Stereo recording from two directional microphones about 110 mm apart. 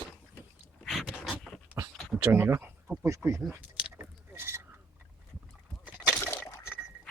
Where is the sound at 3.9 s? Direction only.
20° right (ahead or behind).